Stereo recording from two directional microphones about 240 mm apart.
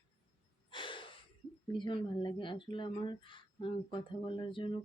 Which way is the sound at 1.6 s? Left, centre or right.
Centre.